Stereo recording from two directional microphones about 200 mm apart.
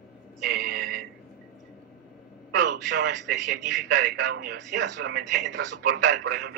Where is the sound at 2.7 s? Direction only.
60° right (ahead or behind).